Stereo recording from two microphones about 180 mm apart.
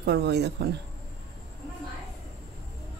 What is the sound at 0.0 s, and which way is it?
Speech, 70° right (ahead or behind).